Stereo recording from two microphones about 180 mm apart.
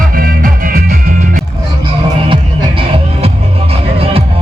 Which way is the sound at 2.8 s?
30° right (ahead or behind).